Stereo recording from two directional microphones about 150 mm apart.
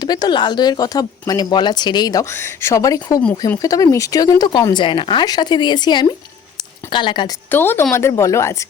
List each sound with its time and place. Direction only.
0.0 s a woman's voice: 25° left (ahead or behind)
7.5 s a woman's voice: 15° left (ahead or behind)